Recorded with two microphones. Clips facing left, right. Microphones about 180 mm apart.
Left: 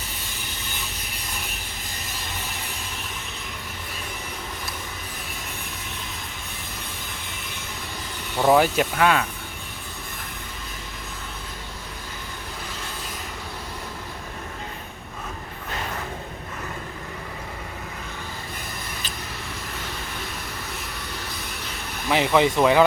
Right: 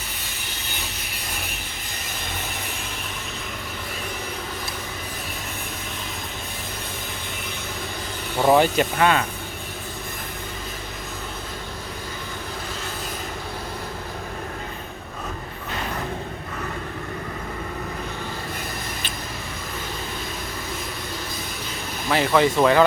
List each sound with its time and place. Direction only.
8.4 s speech: centre (ahead or behind)
22.1 s speech: 20° left (ahead or behind)